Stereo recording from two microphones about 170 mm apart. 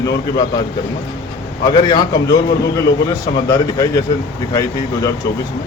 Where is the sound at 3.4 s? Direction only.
20° left (ahead or behind).